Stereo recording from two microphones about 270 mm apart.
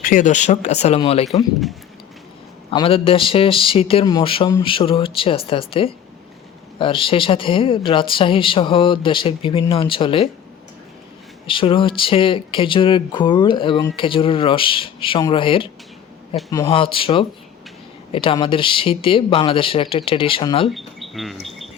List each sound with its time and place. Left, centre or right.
0.0 s speech: left
2.6 s speech: centre
11.4 s speech: centre
20.7 s speech: centre